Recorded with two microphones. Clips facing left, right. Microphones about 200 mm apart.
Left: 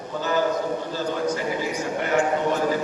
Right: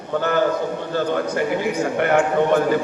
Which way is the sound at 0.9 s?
60° right (ahead or behind).